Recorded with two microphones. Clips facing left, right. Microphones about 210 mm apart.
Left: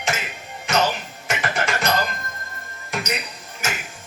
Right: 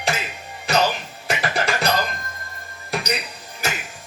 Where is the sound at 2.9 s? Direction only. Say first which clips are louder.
Right 2 dB; 35° right (ahead or behind).